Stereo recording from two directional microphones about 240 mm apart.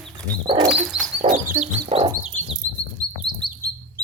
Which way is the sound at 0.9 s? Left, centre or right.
Centre.